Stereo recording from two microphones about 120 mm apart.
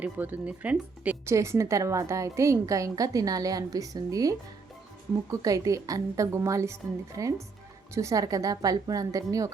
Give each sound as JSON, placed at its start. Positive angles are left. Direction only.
{"t": 0.0, "sound": "speech", "side_deg": -15}
{"t": 1.2, "sound": "a woman's voice", "side_deg": -25}